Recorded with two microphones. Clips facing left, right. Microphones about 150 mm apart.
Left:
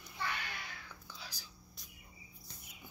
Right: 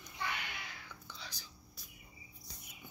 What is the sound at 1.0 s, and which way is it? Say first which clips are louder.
Whispering: even; 5° left (ahead or behind).